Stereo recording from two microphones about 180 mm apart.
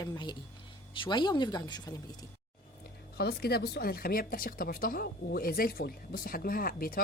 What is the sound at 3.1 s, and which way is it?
Speech, 60° left (ahead or behind).